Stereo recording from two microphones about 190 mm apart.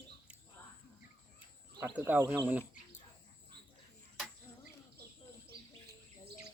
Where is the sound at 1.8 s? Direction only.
10° right (ahead or behind).